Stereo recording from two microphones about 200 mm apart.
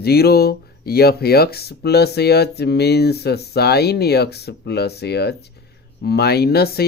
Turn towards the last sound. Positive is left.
turn(degrees=50)  # may be behind; listen again after turning